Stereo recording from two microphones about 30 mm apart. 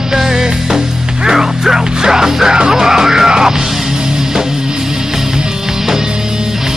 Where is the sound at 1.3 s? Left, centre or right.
Centre.